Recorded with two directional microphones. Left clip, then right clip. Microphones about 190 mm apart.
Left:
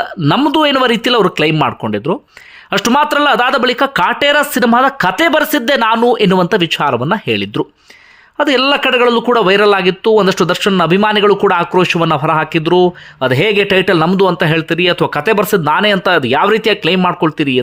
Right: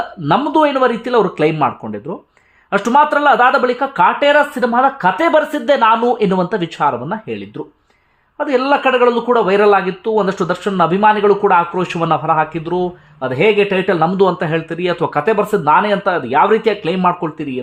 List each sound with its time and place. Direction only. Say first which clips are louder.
0.2 s a man's voice: left 1 dB; 25° left (ahead or behind)
11.8 s a man's voice: left 4 dB; 20° left (ahead or behind)